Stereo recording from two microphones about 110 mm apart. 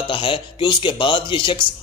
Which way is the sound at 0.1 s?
50° left (ahead or behind).